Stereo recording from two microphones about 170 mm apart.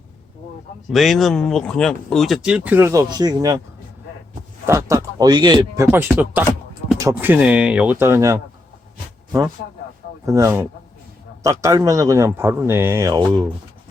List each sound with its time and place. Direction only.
0.9 s speech: centre (ahead or behind); by 3.6 s 20° right (ahead or behind)
4.6 s speech: 15° right (ahead or behind)
10.2 s speech: 15° right (ahead or behind)